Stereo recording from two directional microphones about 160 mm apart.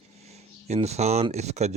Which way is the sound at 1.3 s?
45° right (ahead or behind).